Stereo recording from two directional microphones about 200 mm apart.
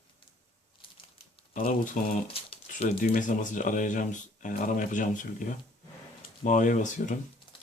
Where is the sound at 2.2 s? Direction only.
30° left (ahead or behind).